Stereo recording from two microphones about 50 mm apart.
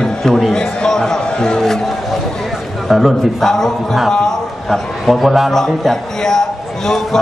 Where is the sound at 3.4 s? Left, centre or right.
Centre.